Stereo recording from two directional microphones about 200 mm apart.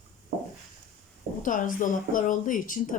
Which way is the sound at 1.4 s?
40° left (ahead or behind).